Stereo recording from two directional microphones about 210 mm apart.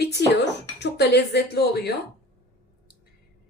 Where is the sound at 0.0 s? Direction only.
50° left (ahead or behind).